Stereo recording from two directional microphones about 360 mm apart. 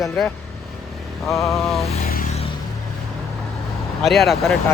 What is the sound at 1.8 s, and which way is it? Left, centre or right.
Vehicle, centre.